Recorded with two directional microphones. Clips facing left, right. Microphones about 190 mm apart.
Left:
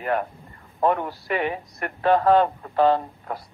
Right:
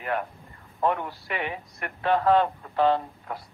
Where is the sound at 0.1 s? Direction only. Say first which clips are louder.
Left 4 dB; 40° left (ahead or behind).